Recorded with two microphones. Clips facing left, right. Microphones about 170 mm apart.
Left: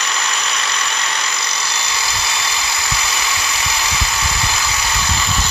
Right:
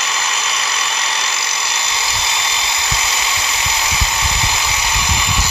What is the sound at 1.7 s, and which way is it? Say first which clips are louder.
Engine: even; 20° right (ahead or behind).